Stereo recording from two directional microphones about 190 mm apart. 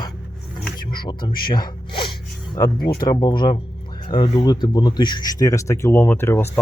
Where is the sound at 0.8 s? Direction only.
25° left (ahead or behind).